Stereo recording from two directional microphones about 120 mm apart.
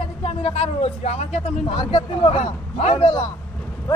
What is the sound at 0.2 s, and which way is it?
Speech, 55° left (ahead or behind).